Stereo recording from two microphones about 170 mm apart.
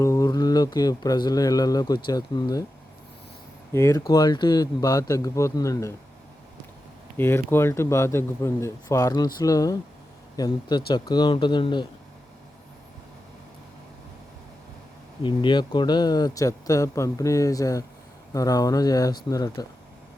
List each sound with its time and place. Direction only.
0.0 s speech: 20° left (ahead or behind)
3.7 s speech: 15° left (ahead or behind)
7.2 s speech: 15° left (ahead or behind)
15.2 s speech: 30° left (ahead or behind)